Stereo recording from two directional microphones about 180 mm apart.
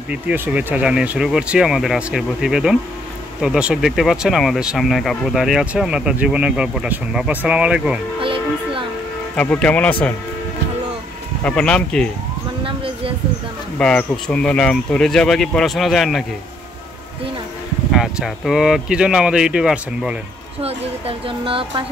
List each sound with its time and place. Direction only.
0.1 s speech: 5° right (ahead or behind)
8.2 s a child's voice: 30° right (ahead or behind)
9.3 s speech: 5° left (ahead or behind)
11.4 s speech: 5° left (ahead or behind)
12.6 s a sound: 30° right (ahead or behind)
13.7 s speech: 5° left (ahead or behind)
17.9 s speech: 5° right (ahead or behind)
20.6 s speech: 30° right (ahead or behind)